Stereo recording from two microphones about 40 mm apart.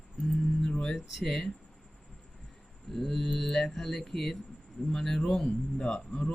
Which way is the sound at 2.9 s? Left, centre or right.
Centre.